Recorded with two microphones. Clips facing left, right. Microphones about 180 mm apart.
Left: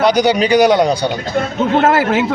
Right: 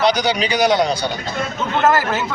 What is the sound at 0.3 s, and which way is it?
Speech, 55° left (ahead or behind).